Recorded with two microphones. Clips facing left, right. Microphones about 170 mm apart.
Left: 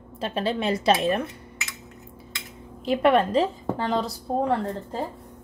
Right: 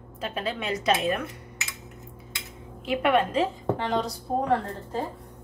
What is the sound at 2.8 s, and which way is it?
A woman's voice, 35° left (ahead or behind).